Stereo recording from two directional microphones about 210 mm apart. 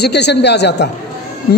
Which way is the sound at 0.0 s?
50° left (ahead or behind).